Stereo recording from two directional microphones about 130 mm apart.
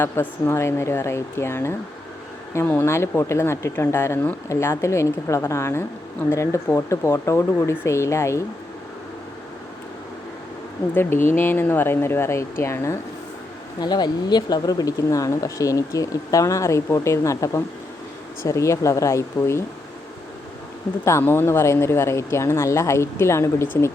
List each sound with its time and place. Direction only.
0.0 s speech: 15° left (ahead or behind)
10.9 s speech: 15° left (ahead or behind)
13.7 s speech: 35° left (ahead or behind)
21.0 s speech: 20° left (ahead or behind)